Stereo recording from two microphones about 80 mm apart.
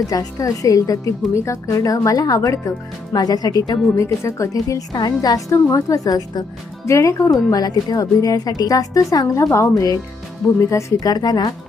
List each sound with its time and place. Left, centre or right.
0.1 s a woman's voice: left
3.9 s speech: left
4.9 s a woman's voice: left
6.8 s a woman's voice: left
11.0 s a woman's voice: left